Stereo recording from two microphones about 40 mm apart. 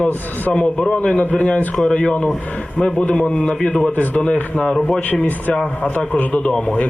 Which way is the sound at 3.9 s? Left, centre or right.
Left.